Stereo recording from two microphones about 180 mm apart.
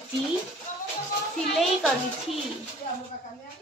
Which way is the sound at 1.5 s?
Centre (ahead or behind).